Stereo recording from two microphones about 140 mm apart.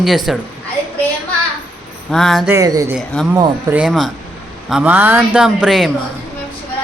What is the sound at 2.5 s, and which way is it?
Speech, 25° right (ahead or behind).